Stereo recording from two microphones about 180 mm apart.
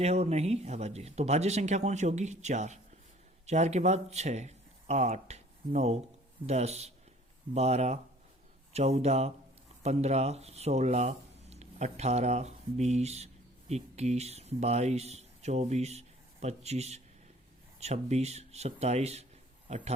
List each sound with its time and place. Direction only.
0.0 s a man's voice: 35° right (ahead or behind)